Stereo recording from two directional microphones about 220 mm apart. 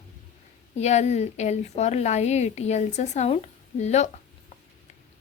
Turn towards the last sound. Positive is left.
turn(degrees=30)  # may be behind; listen again after turning